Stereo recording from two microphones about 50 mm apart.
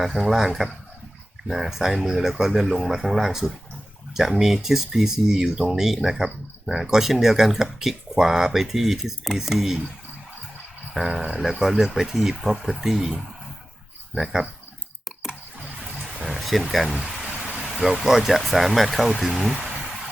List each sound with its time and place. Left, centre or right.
0.0 s speech: centre
11.2 s speech: centre
15.8 s a sound: centre
16.9 s speech: right
17.2 s a sound: centre
17.7 s speech: centre